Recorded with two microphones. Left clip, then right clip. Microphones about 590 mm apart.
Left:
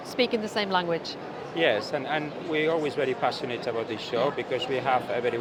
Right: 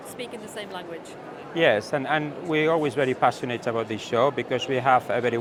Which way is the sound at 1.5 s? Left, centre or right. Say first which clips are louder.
Right 4 dB; right.